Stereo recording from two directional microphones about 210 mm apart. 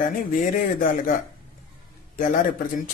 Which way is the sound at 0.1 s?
40° left (ahead or behind).